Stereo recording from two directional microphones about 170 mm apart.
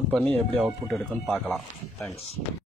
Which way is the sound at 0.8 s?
15° right (ahead or behind).